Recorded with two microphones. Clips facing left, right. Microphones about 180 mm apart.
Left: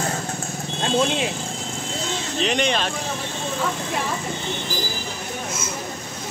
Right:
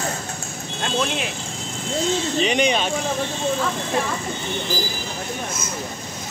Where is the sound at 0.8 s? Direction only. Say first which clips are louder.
Left 3 dB; 25° left (ahead or behind).